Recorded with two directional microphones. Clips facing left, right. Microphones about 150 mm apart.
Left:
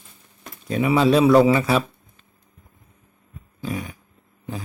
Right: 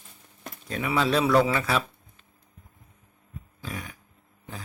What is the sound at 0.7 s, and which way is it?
Speech, 15° left (ahead or behind).